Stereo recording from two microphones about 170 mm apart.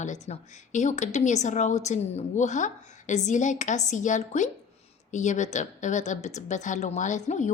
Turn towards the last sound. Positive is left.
turn(degrees=45)  # may be behind; listen again after turning